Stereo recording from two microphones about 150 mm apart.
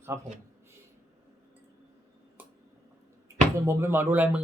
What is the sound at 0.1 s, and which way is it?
Speech, 15° right (ahead or behind).